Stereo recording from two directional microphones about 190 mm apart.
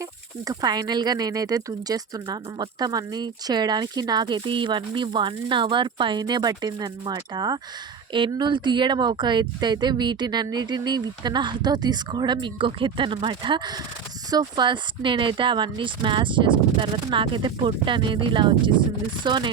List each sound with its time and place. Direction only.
0.4 s speech: 20° right (ahead or behind)